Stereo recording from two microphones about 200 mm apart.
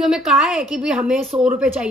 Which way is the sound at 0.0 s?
Centre (ahead or behind).